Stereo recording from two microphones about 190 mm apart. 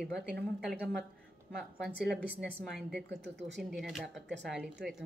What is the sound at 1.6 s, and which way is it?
A woman's voice, centre (ahead or behind).